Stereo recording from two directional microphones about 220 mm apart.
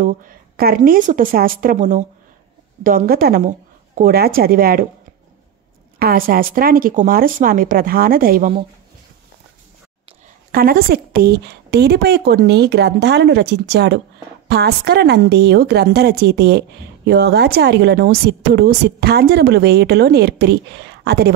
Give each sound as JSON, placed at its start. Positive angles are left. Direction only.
{"t": 0.0, "sound": "speech", "side_deg": -35}
{"t": 5.9, "sound": "speech", "side_deg": -45}
{"t": 10.5, "sound": "a woman's voice", "side_deg": -40}